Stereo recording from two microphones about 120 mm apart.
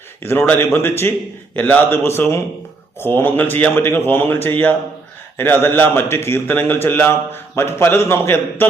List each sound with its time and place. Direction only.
0.2 s a man's voice: 20° left (ahead or behind)